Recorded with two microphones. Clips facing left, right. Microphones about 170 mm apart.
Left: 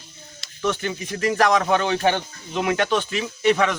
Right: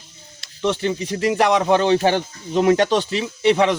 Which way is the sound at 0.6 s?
25° right (ahead or behind).